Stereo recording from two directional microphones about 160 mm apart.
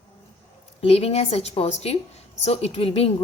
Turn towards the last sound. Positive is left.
turn(degrees=40)  # may be behind; listen again after turning